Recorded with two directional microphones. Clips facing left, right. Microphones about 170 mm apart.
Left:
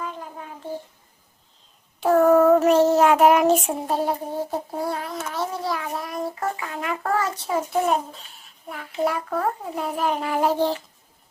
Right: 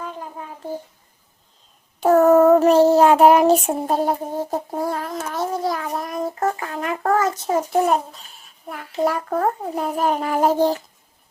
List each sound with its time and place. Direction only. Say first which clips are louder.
2.0 s child singing: right 3 dB; 45° right (ahead or behind)
4.7 s a sound: right 3 dB; 45° right (ahead or behind)
8.7 s a child's voice: right 3 dB; 45° right (ahead or behind)